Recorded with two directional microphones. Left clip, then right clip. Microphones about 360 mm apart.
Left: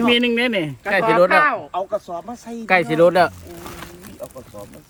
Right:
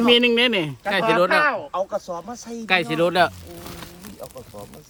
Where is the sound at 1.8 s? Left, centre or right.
Centre.